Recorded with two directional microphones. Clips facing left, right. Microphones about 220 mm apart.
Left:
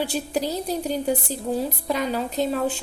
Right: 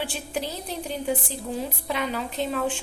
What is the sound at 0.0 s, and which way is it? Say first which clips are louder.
A woman's voice: left 5 dB; 40° left (ahead or behind).